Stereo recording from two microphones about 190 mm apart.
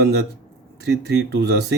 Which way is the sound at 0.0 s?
60° right (ahead or behind).